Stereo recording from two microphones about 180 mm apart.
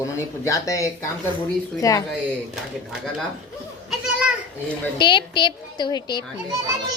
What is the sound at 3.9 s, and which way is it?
Children playing, 5° right (ahead or behind).